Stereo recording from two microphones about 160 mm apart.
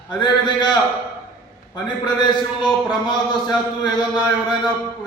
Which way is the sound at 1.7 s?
25° left (ahead or behind).